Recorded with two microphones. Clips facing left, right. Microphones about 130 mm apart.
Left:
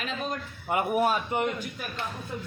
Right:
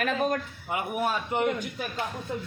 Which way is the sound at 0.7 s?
50° left (ahead or behind).